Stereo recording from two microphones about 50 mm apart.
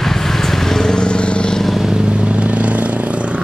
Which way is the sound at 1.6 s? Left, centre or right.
Centre.